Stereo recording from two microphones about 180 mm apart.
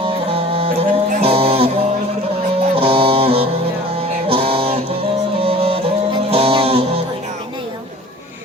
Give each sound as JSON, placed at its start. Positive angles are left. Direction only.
{"t": 0.0, "sound": "music", "side_deg": -30}